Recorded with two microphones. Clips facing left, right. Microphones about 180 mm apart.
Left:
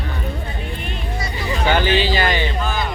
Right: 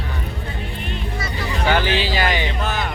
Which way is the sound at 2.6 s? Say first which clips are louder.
Left 1 dB; 70° right (ahead or behind).